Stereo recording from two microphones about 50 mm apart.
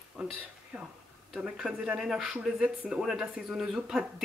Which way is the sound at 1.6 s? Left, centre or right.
Centre.